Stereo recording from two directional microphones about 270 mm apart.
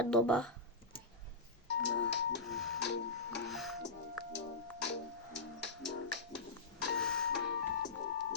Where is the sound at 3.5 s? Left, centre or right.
Centre.